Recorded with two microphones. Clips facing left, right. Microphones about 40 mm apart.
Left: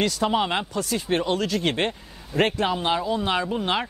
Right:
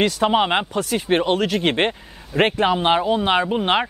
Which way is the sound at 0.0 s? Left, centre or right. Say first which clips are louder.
Right 5 dB; right.